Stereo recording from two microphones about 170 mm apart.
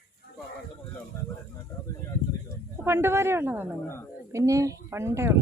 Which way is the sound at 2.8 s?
15° right (ahead or behind).